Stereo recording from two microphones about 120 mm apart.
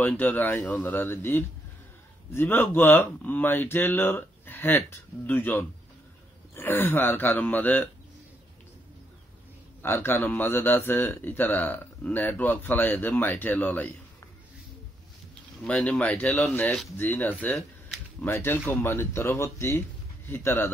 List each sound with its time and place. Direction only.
0.0 s speech: 15° left (ahead or behind)
9.8 s speech: 20° left (ahead or behind)
15.6 s speech: 10° left (ahead or behind)